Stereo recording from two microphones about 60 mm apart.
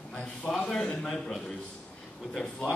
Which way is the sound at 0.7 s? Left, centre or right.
Centre.